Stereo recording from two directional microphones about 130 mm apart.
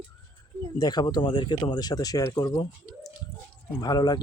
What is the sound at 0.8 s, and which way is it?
Speech, 30° left (ahead or behind).